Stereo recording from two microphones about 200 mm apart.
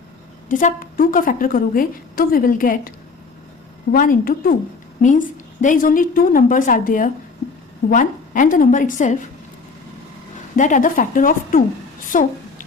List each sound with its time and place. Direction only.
0.4 s a woman's voice: 40° left (ahead or behind)
3.9 s a woman's voice: 45° left (ahead or behind)
10.6 s a woman's voice: 40° left (ahead or behind)